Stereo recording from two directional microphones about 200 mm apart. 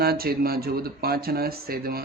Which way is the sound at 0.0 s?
50° right (ahead or behind).